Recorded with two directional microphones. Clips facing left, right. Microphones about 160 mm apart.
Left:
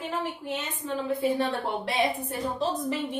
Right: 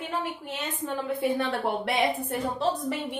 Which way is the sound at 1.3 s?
60° right (ahead or behind).